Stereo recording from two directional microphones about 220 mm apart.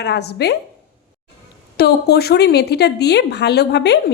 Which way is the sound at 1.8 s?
45° left (ahead or behind).